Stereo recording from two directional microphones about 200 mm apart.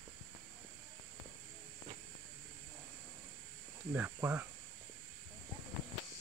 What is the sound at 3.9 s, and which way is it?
Speech, 10° right (ahead or behind).